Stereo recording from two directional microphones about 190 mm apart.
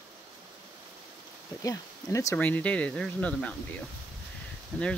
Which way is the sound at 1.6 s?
15° left (ahead or behind).